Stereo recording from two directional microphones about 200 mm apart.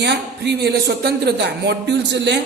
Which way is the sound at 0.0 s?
60° right (ahead or behind).